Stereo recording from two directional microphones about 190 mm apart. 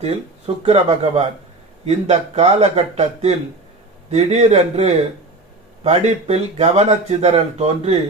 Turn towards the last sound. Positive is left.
turn(degrees=-35)  # may be behind; listen again after turning